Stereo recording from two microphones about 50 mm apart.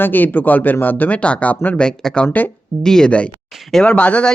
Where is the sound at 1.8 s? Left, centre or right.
Centre.